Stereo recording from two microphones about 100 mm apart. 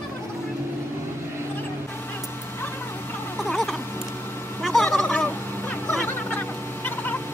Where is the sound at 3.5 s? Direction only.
Centre (ahead or behind).